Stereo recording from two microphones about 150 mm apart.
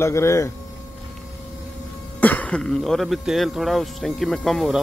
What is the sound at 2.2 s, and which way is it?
Speech, 10° left (ahead or behind).